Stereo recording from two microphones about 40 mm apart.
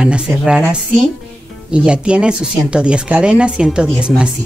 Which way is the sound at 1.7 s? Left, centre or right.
Right.